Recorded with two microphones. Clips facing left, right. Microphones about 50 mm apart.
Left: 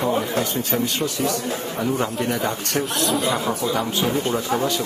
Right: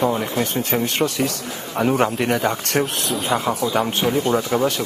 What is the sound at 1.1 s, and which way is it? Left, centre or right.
Speech, right.